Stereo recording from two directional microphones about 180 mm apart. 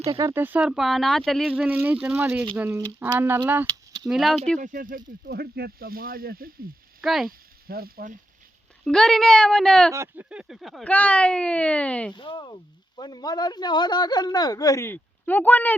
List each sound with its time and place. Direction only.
0.2 s speech: 15° right (ahead or behind)
4.1 s speech: centre (ahead or behind)
4.6 s speech: 50° right (ahead or behind)
7.0 s speech: centre (ahead or behind)
7.3 s speech: 55° right (ahead or behind)
8.8 s speech: 5° left (ahead or behind)
9.9 s speech: 15° right (ahead or behind); by 12.1 s 5° left (ahead or behind)
12.1 s speech: 25° left (ahead or behind); by 15.7 s 10° left (ahead or behind)